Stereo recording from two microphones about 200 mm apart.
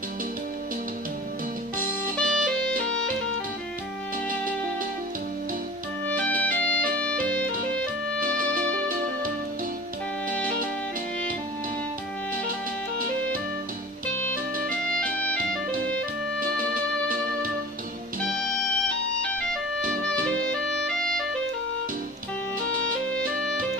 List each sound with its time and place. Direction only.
2.1 s music: 5° left (ahead or behind)
6.0 s music: 5° left (ahead or behind)
8.2 s music: 45° right (ahead or behind)
19.2 s music: 5° left (ahead or behind)
20.8 s clarinet: 5° left (ahead or behind)